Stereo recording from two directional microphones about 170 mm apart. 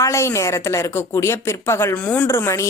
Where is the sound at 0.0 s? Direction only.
15° left (ahead or behind).